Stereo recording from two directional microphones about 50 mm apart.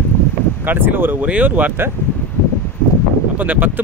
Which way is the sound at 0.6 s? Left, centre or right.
Right.